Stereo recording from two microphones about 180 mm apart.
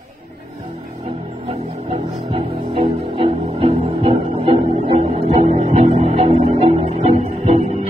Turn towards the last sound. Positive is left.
turn(degrees=-35)  # may be behind; listen again after turning